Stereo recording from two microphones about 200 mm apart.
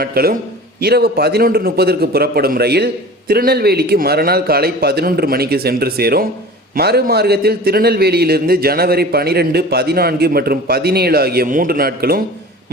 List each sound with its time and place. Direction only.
0.0 s a man's voice: 50° right (ahead or behind)